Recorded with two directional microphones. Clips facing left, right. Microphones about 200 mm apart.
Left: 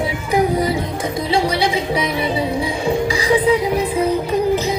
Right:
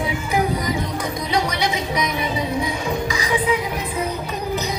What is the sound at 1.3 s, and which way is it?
Music, 30° left (ahead or behind).